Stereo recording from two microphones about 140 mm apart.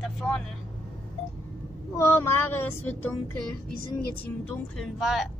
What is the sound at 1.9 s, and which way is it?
Child singing, 20° left (ahead or behind).